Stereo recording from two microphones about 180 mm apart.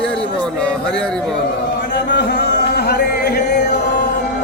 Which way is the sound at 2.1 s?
70° left (ahead or behind).